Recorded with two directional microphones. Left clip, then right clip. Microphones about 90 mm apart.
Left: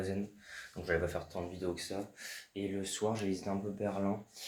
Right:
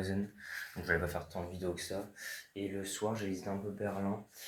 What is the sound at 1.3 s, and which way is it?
Speech, 20° left (ahead or behind).